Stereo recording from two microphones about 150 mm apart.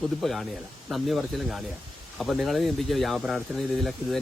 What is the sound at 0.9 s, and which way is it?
Speech, centre (ahead or behind).